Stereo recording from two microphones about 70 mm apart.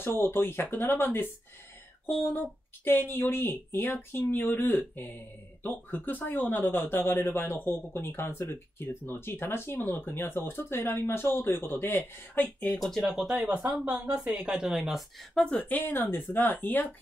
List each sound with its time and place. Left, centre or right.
0.0 s speech: left
12.8 s speech: centre
14.1 s a woman's voice: centre
14.8 s speech: centre
15.3 s speech: centre